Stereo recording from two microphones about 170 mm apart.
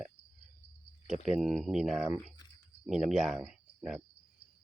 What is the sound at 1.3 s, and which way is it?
Speech, centre (ahead or behind).